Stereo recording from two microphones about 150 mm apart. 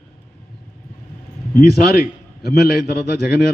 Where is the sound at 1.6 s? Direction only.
90° left.